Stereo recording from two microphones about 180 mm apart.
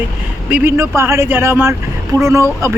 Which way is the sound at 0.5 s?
15° right (ahead or behind).